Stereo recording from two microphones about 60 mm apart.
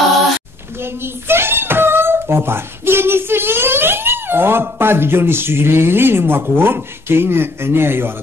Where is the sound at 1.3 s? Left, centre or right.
Right.